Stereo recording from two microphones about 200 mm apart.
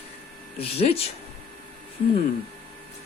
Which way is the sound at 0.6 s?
30° left (ahead or behind).